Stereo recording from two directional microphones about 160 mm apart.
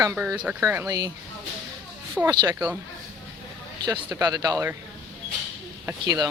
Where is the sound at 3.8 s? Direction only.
25° right (ahead or behind).